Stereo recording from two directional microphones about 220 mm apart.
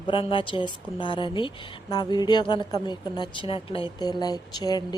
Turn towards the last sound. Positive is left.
turn(degrees=20)  # may be behind; listen again after turning